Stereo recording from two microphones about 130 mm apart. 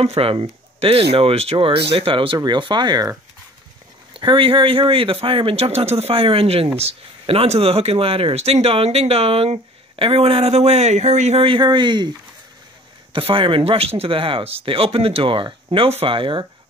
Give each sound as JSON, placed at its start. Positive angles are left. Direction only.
{"t": 0.0, "sound": "speech", "side_deg": -50}
{"t": 4.2, "sound": "speech", "side_deg": -40}
{"t": 11.4, "sound": "a man's voice", "side_deg": -40}
{"t": 13.1, "sound": "speech", "side_deg": -45}